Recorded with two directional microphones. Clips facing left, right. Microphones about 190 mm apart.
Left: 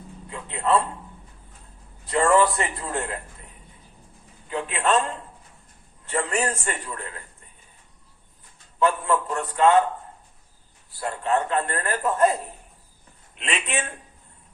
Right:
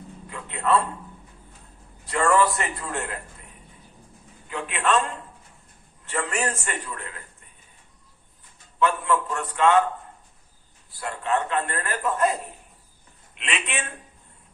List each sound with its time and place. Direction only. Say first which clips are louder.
0.3 s a man's voice: even; 30° left (ahead or behind)
2.0 s a man's voice: left 2 dB; 30° left (ahead or behind)
4.4 s a man's voice: left 1 dB; 35° left (ahead or behind)
6.1 s a man's voice: left 2 dB; 35° left (ahead or behind)
8.8 s a man's voice: left 1 dB; 35° left (ahead or behind)
11.0 s a man's voice: left 2 dB; 35° left (ahead or behind)